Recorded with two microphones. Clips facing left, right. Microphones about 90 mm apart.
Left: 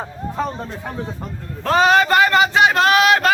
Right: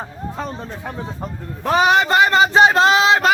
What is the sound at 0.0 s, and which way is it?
Speech, 5° left (ahead or behind).